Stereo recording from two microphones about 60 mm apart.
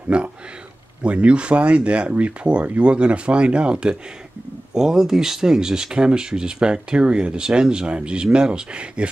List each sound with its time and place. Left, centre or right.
0.1 s speech: centre